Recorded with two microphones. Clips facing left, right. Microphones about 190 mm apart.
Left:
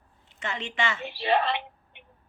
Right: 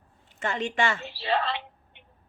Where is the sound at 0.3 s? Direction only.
45° right (ahead or behind).